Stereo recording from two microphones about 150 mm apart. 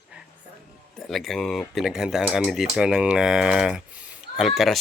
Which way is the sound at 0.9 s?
Centre (ahead or behind).